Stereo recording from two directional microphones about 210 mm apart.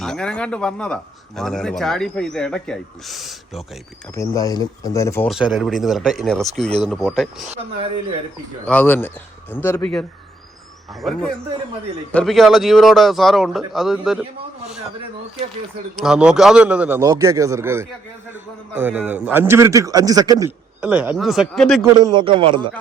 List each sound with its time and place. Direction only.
0.0 s speech: 5° left (ahead or behind)
4.1 s a man's voice: 15° left (ahead or behind)
5.3 s speech: centre (ahead or behind)
8.6 s a man's voice: 10° left (ahead or behind)
12.1 s speech: centre (ahead or behind)
16.0 s a man's voice: 5° right (ahead or behind)
20.8 s speech: 5° right (ahead or behind)
22.0 s a man's voice: 25° right (ahead or behind)